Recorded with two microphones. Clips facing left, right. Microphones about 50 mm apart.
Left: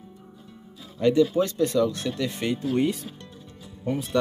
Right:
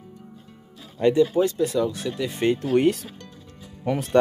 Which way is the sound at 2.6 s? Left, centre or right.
Right.